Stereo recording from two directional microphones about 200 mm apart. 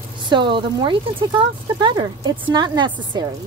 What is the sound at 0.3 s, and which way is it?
Speech, 25° right (ahead or behind).